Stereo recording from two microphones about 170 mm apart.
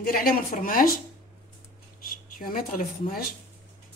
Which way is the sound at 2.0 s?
55° left (ahead or behind).